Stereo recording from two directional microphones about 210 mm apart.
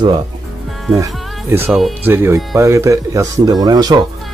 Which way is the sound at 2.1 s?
15° right (ahead or behind).